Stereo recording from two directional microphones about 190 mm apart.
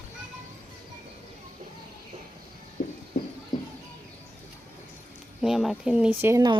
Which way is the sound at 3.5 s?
20° left (ahead or behind).